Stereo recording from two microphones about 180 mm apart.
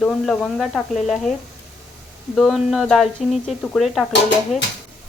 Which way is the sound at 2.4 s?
Centre (ahead or behind).